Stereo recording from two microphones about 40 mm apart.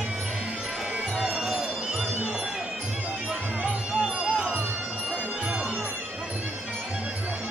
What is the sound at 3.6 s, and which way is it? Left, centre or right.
Music, right.